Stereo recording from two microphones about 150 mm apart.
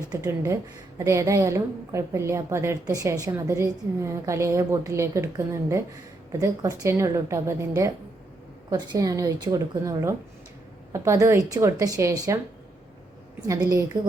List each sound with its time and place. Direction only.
0.1 s a woman's voice: 20° right (ahead or behind)